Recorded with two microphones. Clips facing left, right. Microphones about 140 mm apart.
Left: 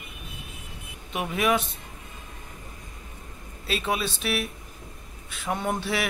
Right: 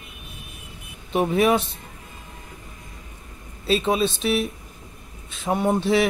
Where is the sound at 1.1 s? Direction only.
35° right (ahead or behind).